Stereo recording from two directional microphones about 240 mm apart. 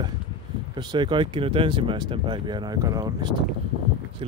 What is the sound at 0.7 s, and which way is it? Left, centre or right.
Speech, centre.